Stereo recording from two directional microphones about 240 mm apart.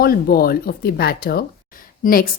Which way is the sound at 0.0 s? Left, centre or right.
Left.